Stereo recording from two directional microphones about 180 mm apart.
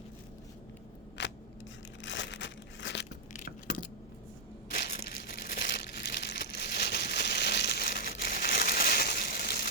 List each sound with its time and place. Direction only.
1.2 s scissors: 70° left (ahead or behind)
2.0 s crumpling: 85° left
3.3 s a sound: 45° left (ahead or behind)
4.7 s crushing: 60° left (ahead or behind)